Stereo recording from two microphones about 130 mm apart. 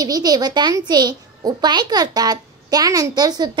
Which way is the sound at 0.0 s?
30° right (ahead or behind).